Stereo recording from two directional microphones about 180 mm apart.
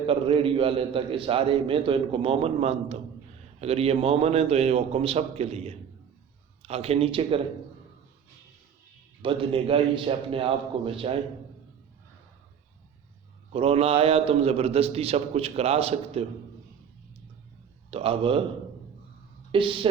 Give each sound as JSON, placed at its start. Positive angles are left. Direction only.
{"t": 0.1, "sound": "a man's voice", "side_deg": -30}
{"t": 9.2, "sound": "a man's voice", "side_deg": -30}
{"t": 13.5, "sound": "a man's voice", "side_deg": -30}
{"t": 17.9, "sound": "a man's voice", "side_deg": -30}
{"t": 19.5, "sound": "speech", "side_deg": -30}